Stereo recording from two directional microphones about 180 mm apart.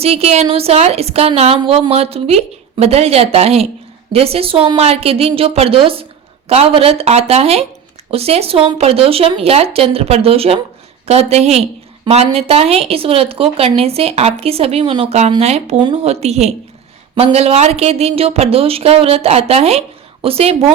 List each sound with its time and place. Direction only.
0.0 s speech: 35° right (ahead or behind)